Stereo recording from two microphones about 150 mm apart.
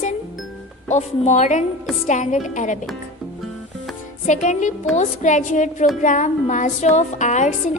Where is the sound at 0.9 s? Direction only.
55° left (ahead or behind).